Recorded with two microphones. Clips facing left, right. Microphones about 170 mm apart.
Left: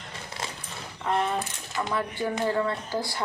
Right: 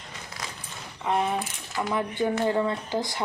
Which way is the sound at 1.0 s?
10° right (ahead or behind).